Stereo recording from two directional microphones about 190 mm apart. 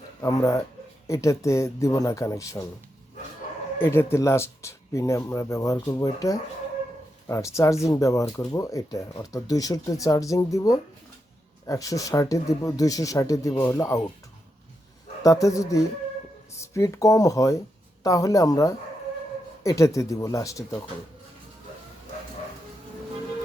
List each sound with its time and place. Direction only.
0.2 s speech: 20° left (ahead or behind)
3.8 s speech: 10° left (ahead or behind)
15.2 s speech: 15° left (ahead or behind)